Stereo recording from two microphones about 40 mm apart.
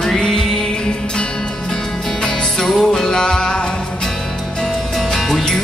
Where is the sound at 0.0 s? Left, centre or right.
Centre.